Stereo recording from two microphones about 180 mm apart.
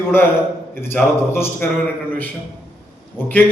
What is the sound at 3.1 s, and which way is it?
Speech, 10° left (ahead or behind).